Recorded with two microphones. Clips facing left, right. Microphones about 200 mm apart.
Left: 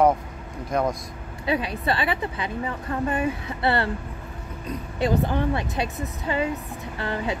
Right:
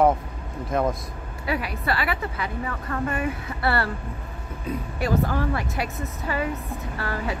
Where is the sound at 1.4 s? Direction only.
25° left (ahead or behind).